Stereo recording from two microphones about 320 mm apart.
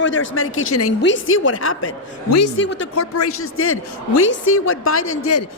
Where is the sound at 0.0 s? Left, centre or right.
Left.